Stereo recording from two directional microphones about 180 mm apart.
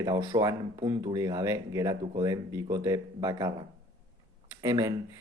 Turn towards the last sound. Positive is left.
turn(degrees=-20)  # may be behind; listen again after turning